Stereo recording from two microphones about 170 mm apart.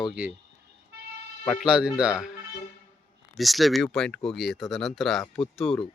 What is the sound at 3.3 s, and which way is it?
Speech, centre (ahead or behind).